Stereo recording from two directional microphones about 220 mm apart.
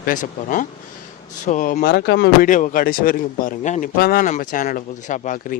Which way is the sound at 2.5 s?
35° left (ahead or behind).